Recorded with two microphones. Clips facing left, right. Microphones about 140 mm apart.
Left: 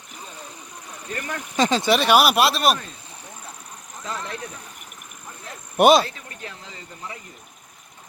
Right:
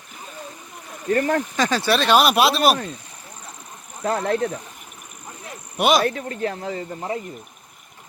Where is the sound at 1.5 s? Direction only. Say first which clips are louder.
Left 1 dB; 25° left (ahead or behind); by 2.8 s centre (ahead or behind).